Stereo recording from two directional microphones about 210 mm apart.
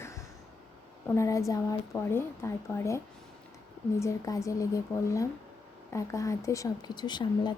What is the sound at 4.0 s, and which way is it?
Speech, 15° left (ahead or behind).